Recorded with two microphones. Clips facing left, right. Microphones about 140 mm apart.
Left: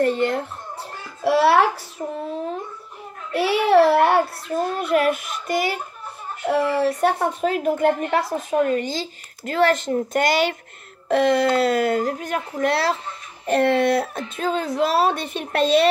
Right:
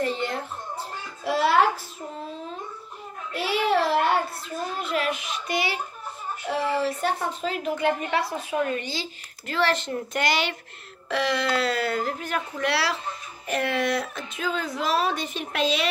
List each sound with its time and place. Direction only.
0.0 s a child's voice: 55° left (ahead or behind)
6.4 s a woman's voice: 60° left (ahead or behind)
13.5 s a child's voice: 60° left (ahead or behind)
14.5 s a woman's voice: 45° left (ahead or behind)